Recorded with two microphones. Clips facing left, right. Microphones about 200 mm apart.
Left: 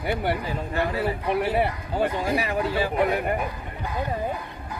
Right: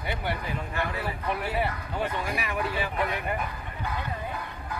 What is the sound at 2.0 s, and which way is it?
Speech, 35° left (ahead or behind).